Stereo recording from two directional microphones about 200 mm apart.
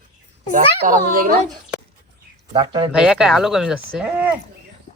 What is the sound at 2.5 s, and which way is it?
Speech, 20° right (ahead or behind).